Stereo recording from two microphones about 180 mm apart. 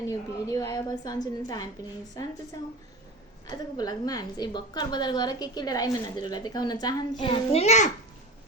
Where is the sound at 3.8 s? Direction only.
20° left (ahead or behind); by 7.9 s 40° left (ahead or behind).